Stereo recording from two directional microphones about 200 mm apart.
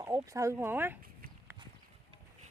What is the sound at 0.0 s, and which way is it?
Speech, 15° right (ahead or behind).